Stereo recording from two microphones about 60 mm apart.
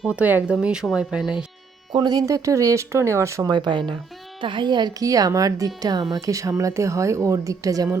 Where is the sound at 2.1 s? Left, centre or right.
Right.